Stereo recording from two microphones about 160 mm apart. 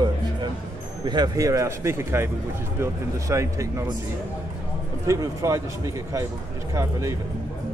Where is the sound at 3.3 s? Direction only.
20° right (ahead or behind).